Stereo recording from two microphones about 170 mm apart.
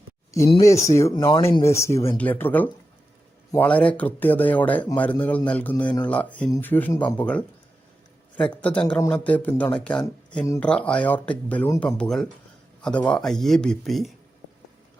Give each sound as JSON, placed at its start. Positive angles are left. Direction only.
{"t": 0.9, "sound": "speech", "side_deg": 20}
{"t": 10.4, "sound": "speech", "side_deg": 20}
{"t": 10.7, "sound": "speech", "side_deg": 5}